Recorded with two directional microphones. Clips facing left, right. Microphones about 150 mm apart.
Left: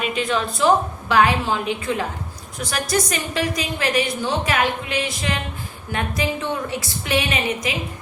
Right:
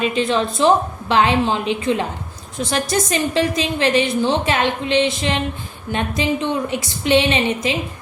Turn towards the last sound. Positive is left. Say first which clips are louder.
# right 5 dB
turn(degrees=-25)  # may be behind; listen again after turning